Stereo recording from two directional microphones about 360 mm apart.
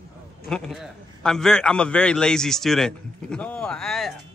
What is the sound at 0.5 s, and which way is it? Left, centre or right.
Speech, centre.